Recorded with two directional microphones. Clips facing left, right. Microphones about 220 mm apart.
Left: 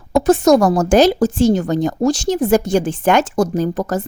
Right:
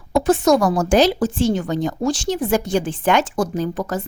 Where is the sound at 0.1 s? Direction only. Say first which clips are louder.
Left 4 dB; 40° left (ahead or behind).